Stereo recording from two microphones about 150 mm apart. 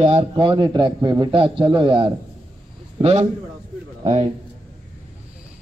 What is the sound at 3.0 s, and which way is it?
A man's voice, 45° right (ahead or behind).